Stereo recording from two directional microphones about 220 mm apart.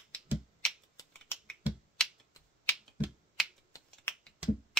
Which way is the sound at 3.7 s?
10° left (ahead or behind).